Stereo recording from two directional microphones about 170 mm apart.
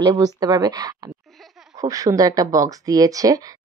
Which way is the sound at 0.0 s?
20° right (ahead or behind).